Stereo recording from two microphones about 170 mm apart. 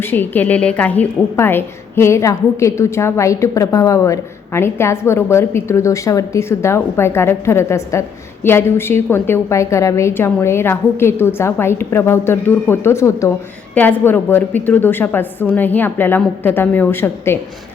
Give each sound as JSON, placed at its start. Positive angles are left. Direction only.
{"t": 0.0, "sound": "a woman's voice", "side_deg": 10}